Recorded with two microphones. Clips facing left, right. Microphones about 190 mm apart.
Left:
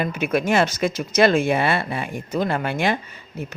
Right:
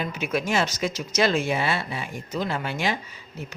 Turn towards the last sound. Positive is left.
turn(degrees=55)  # may be behind; listen again after turning